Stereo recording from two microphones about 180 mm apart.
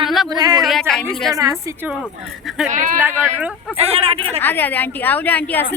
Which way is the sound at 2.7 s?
45° right (ahead or behind).